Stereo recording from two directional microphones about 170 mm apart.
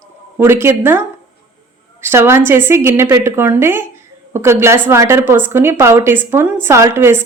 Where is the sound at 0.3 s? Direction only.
15° right (ahead or behind).